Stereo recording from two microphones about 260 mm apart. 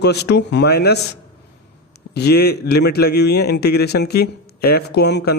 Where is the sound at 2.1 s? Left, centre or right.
Left.